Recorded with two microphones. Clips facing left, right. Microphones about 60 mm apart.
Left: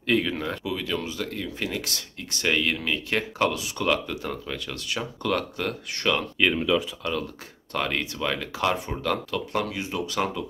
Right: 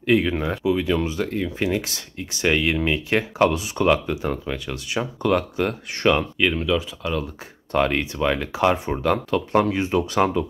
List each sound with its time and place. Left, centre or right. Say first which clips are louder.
0.0 s speech: right 5 dB; centre
6.3 s speech: right 1 dB; centre
7.7 s speech: right 7 dB; right